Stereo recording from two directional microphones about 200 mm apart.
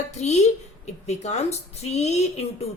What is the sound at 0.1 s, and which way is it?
A woman's voice, 35° left (ahead or behind).